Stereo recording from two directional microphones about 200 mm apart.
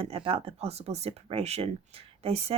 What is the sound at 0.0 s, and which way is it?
Speech, 25° right (ahead or behind).